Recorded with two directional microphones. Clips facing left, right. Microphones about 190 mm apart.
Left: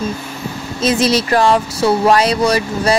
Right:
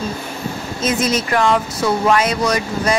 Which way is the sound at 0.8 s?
35° left (ahead or behind).